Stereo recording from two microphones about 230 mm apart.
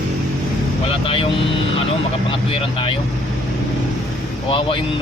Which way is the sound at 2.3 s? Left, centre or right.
Left.